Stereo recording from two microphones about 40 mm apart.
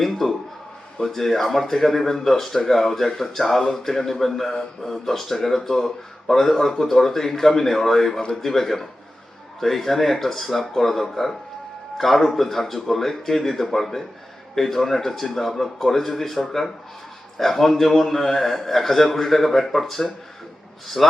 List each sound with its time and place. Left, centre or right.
0.0 s a man's voice: centre